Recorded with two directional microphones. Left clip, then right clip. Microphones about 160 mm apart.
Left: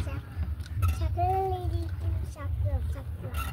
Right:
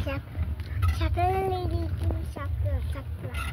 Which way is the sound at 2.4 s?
60° right (ahead or behind).